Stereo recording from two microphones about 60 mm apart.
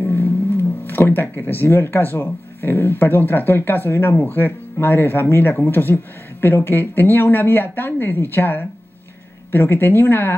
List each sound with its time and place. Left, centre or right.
0.0 s speech: left